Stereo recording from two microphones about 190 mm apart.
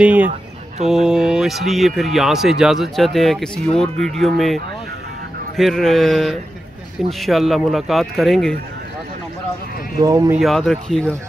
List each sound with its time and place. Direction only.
0.0 s speech: 5° right (ahead or behind)
5.6 s speech: centre (ahead or behind)
10.0 s speech: 15° right (ahead or behind)
10.4 s speech: centre (ahead or behind)